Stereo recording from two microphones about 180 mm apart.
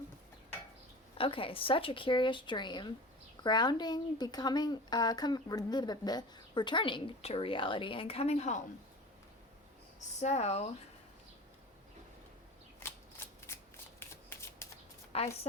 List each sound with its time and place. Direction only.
1.2 s speech: 30° left (ahead or behind)
10.2 s speech: 40° left (ahead or behind)
12.8 s shuffling cards: 15° left (ahead or behind)
14.6 s shuffling cards: 15° left (ahead or behind)
15.1 s a woman's voice: 35° left (ahead or behind)